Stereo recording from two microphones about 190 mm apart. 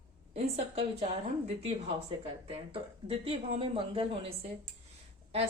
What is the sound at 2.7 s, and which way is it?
Speech, 30° right (ahead or behind).